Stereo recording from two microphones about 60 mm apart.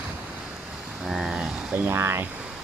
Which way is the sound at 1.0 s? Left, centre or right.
Centre.